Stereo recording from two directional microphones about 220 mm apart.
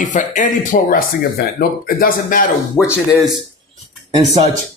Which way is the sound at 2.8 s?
5° left (ahead or behind).